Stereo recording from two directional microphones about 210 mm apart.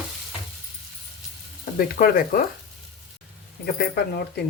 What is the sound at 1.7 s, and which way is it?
Speech, 45° left (ahead or behind).